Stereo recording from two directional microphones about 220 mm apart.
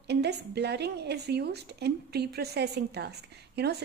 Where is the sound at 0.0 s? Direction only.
50° right (ahead or behind).